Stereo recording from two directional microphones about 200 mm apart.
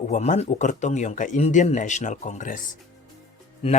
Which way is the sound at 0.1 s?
35° left (ahead or behind).